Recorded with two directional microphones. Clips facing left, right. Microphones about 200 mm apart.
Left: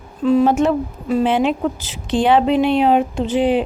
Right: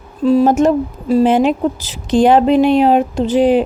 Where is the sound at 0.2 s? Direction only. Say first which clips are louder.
Right 3 dB; 35° right (ahead or behind).